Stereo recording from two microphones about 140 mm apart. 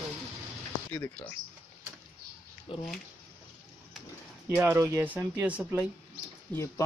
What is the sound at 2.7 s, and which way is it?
Speech, 40° left (ahead or behind).